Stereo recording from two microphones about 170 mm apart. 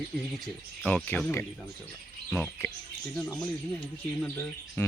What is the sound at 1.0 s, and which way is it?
Speech, 10° left (ahead or behind).